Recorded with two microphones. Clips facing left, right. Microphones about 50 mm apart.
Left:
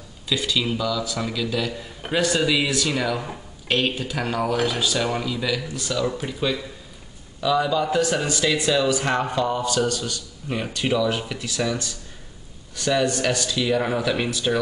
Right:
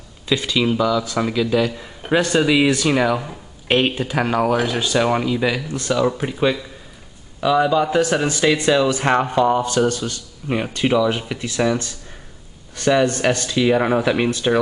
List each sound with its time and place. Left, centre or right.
0.3 s speech: right
0.6 s a man's voice: centre
4.7 s a man's voice: right
5.7 s speech: right
5.9 s a man's voice: right
8.9 s speech: right
9.2 s a man's voice: right